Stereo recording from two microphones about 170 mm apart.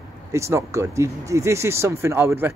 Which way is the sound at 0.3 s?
15° right (ahead or behind).